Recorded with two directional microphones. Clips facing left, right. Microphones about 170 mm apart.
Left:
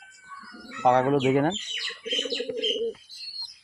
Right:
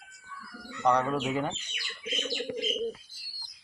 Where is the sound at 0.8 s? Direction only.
65° left (ahead or behind).